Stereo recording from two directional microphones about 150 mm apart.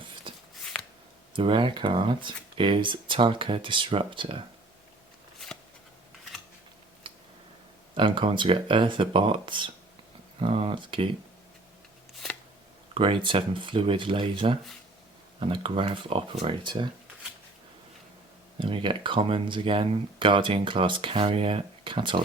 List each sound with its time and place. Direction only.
0.6 s shuffling cards: 5° left (ahead or behind)
1.4 s speech: 35° right (ahead or behind)
7.1 s tick: 35° right (ahead or behind)
7.9 s speech: 35° right (ahead or behind)
12.9 s speech: 35° right (ahead or behind)
18.6 s speech: 35° right (ahead or behind)